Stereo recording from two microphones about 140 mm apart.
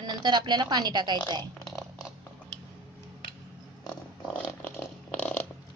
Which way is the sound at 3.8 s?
10° left (ahead or behind).